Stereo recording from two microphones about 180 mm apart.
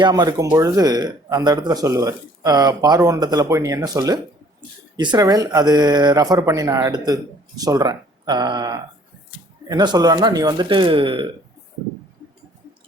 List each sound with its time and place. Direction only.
0.0 s speech: 20° right (ahead or behind)